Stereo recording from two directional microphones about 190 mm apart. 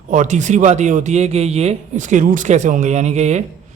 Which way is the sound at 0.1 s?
40° right (ahead or behind).